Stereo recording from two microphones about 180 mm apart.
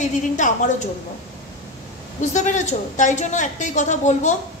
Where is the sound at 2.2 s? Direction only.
40° left (ahead or behind).